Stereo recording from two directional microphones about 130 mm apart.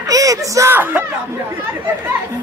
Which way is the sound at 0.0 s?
25° right (ahead or behind).